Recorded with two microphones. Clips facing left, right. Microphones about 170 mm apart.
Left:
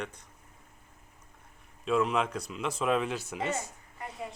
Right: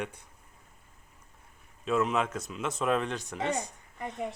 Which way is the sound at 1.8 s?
Centre (ahead or behind).